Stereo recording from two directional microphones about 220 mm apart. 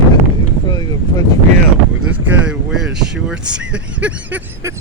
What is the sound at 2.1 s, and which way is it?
Vehicle, 5° right (ahead or behind).